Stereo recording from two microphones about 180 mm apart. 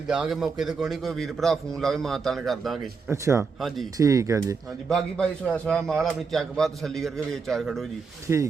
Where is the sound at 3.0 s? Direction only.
15° right (ahead or behind).